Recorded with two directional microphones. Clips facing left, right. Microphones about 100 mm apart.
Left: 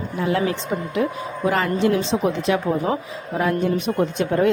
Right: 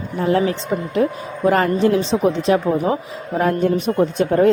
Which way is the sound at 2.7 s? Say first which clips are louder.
Right 3 dB; 25° right (ahead or behind).